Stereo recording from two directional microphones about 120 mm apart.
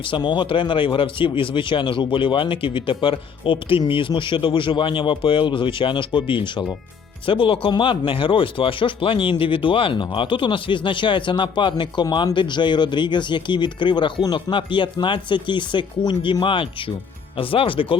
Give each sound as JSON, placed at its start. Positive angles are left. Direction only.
{"t": 0.0, "sound": "speech", "side_deg": 40}